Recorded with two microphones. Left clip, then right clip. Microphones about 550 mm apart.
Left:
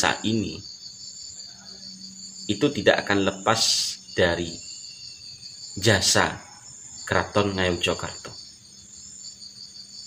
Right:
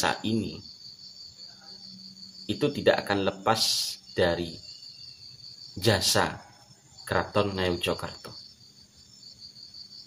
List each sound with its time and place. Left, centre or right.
0.0 s a man's voice: right
2.4 s a man's voice: right
5.8 s a man's voice: right